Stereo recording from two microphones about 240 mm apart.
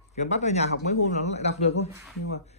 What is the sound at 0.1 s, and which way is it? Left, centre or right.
A man's voice, left.